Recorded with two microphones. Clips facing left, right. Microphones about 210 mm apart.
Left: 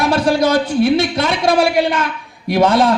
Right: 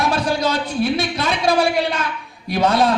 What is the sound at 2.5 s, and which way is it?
Speech, 50° left (ahead or behind).